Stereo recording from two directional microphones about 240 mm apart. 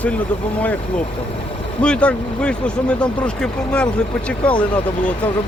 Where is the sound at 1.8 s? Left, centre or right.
Centre.